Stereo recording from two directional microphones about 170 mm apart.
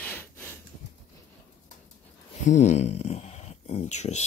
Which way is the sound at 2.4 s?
40° left (ahead or behind).